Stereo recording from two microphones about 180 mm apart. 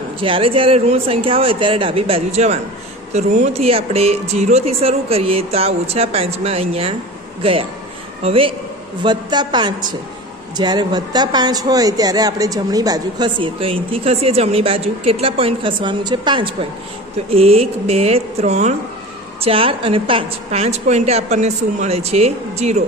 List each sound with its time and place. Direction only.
0.2 s speech: 30° right (ahead or behind)
8.2 s speech: 30° right (ahead or behind)